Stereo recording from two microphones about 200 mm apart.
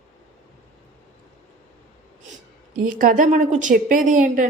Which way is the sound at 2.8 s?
45° right (ahead or behind).